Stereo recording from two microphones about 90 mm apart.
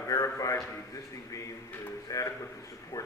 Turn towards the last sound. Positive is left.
turn(degrees=60)  # may be behind; listen again after turning